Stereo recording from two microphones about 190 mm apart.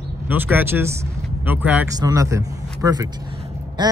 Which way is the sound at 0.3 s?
10° right (ahead or behind).